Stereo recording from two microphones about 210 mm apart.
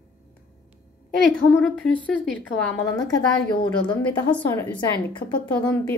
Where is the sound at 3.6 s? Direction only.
20° left (ahead or behind).